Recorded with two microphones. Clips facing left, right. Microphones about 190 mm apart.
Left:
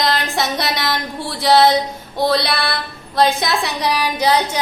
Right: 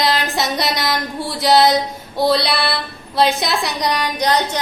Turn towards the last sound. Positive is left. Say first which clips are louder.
# left 1 dB
turn(degrees=10)  # may be behind; listen again after turning